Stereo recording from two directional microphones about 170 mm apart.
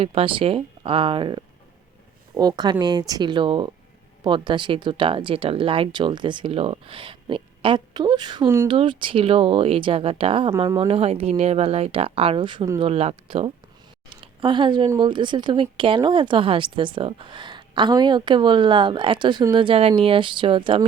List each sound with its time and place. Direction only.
0.0 s speech: 35° right (ahead or behind)
14.1 s a sound: 30° right (ahead or behind)
14.8 s speech: 25° right (ahead or behind)